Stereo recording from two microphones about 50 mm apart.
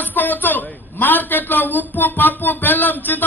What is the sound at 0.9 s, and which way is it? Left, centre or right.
A man's voice, left.